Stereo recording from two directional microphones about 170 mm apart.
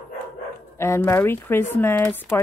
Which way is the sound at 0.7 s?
15° left (ahead or behind).